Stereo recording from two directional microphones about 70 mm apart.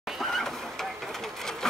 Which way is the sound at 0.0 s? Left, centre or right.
Centre.